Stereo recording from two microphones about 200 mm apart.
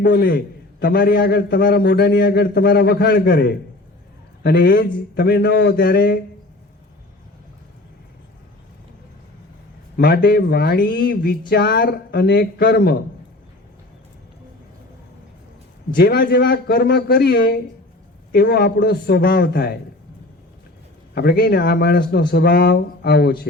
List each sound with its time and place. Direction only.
0.0 s a man's voice: 50° left (ahead or behind)
10.0 s a man's voice: 50° left (ahead or behind)
16.0 s a man's voice: 50° left (ahead or behind)
21.2 s a man's voice: 55° left (ahead or behind)